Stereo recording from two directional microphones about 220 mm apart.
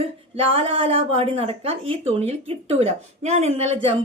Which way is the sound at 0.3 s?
25° right (ahead or behind).